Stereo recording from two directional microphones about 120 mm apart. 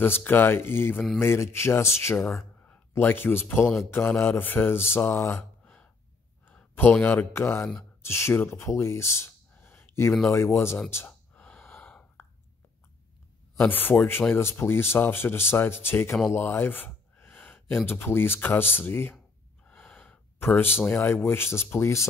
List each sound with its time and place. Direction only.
0.0 s speech: 20° left (ahead or behind)
11.1 s gasp: 15° left (ahead or behind)
13.6 s speech: 15° left (ahead or behind)